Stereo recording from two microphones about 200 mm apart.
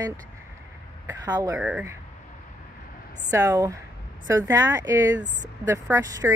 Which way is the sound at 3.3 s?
15° right (ahead or behind).